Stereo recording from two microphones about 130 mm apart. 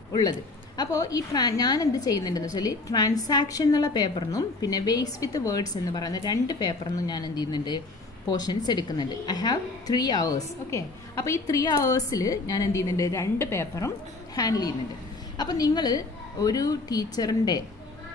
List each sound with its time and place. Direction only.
0.7 s a woman's voice: 25° left (ahead or behind)